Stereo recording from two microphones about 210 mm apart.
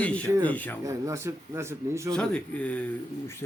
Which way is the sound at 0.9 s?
15° right (ahead or behind).